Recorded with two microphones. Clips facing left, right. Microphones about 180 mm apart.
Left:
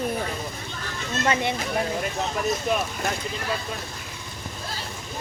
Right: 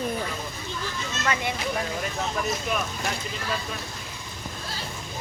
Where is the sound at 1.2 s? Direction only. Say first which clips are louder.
Left 3 dB; 25° left (ahead or behind).